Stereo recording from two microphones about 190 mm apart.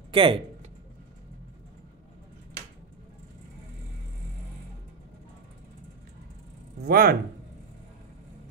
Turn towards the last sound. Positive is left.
turn(degrees=-55)  # may be behind; listen again after turning